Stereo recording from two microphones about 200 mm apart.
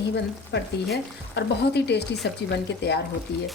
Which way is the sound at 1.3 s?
55° left (ahead or behind).